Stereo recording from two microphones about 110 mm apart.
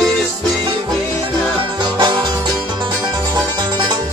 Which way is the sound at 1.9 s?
45° right (ahead or behind).